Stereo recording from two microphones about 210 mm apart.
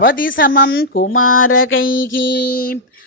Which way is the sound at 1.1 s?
80° left.